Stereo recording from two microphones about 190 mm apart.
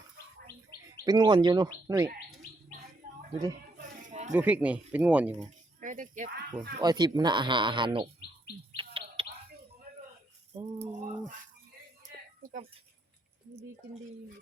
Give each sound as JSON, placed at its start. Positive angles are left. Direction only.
{"t": 1.0, "sound": "speech", "side_deg": -25}
{"t": 3.0, "sound": "a sound", "side_deg": -50}
{"t": 4.3, "sound": "speech", "side_deg": -10}
{"t": 5.8, "sound": "speech", "side_deg": -40}
{"t": 6.6, "sound": "speech", "side_deg": -20}
{"t": 8.7, "sound": "chirp", "side_deg": -30}
{"t": 12.4, "sound": "a sound", "side_deg": -45}